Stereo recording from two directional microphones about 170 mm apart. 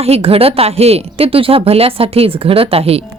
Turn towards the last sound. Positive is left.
turn(degrees=-35)  # may be behind; listen again after turning